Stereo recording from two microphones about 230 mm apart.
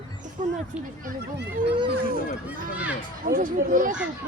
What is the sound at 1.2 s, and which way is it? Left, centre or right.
Speech, right.